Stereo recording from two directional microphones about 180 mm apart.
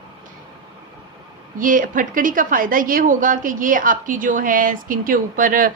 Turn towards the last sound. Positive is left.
turn(degrees=-50)  # may be behind; listen again after turning